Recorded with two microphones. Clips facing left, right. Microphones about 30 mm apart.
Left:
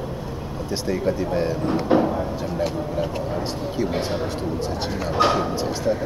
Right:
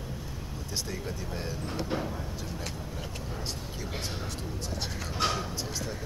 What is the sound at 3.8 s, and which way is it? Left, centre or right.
Speech, left.